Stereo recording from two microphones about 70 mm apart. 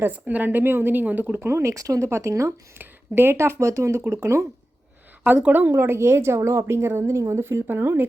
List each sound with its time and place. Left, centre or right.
0.0 s speech: right
1.5 s speech: right
2.7 s speech: right
5.2 s speech: right